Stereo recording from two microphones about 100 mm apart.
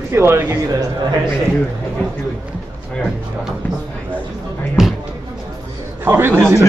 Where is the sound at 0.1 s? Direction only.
25° right (ahead or behind).